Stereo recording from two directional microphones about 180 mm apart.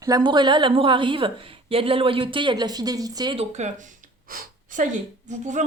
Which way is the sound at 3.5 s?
40° right (ahead or behind).